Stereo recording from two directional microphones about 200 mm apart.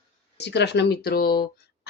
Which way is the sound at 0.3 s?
60° left (ahead or behind).